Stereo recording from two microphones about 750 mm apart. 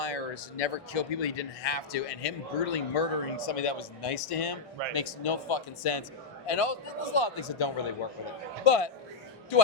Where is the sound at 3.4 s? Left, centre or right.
Left.